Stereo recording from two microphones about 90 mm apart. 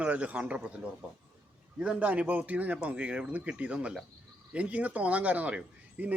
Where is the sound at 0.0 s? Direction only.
15° right (ahead or behind).